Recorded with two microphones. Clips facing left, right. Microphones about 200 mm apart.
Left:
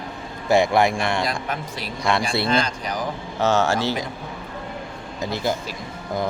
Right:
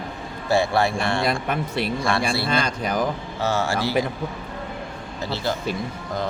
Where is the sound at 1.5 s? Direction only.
60° right (ahead or behind).